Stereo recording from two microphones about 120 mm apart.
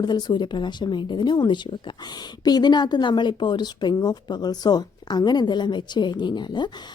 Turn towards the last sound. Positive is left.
turn(degrees=40)  # may be behind; listen again after turning